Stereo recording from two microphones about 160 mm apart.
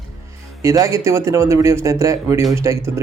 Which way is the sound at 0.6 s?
20° right (ahead or behind).